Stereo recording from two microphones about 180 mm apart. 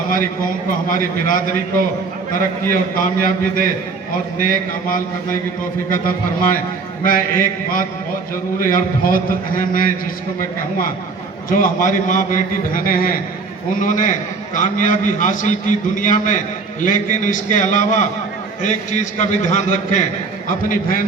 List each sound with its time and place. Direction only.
0.9 s a man's voice: 50° left (ahead or behind)
2.9 s a man's voice: 50° left (ahead or behind)
11.4 s a man's voice: 50° left (ahead or behind)